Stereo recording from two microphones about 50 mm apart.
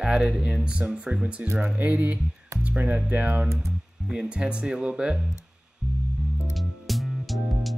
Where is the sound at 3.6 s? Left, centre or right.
Centre.